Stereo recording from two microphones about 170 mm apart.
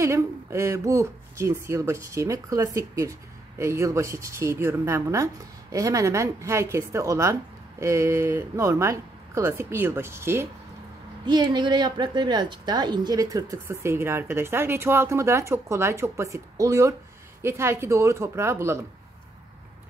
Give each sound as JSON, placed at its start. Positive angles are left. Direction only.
{"t": 0.0, "sound": "speech", "side_deg": -15}
{"t": 11.2, "sound": "speech", "side_deg": -25}